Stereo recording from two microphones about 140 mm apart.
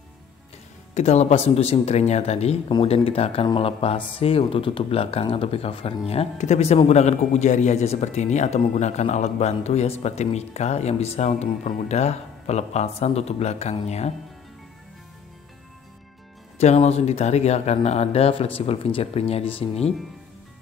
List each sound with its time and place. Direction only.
0.9 s speech: 50° left (ahead or behind)
16.5 s speech: 50° left (ahead or behind)